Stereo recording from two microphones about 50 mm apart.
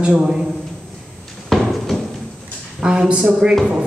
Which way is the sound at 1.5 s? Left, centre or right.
Centre.